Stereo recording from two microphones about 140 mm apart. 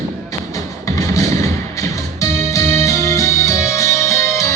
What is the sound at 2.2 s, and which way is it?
Music, 20° left (ahead or behind).